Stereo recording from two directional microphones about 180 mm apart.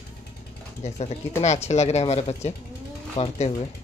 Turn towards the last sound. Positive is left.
turn(degrees=35)  # may be behind; listen again after turning